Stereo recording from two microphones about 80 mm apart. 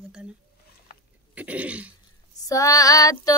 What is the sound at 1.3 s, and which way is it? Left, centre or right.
Speech, centre.